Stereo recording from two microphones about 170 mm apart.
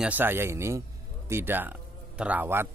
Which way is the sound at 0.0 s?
10° right (ahead or behind).